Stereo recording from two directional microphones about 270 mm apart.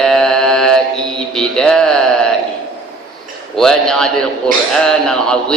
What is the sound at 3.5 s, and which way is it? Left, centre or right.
A man's voice, centre.